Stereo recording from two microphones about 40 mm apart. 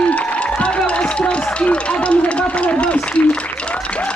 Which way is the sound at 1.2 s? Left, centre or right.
Left.